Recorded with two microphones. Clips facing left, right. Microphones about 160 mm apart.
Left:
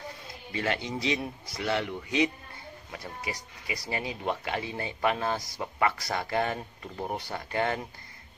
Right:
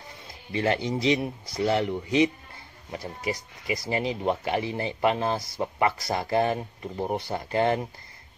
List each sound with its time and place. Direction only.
0.5 s speech: 30° right (ahead or behind)
3.6 s speech: 25° right (ahead or behind)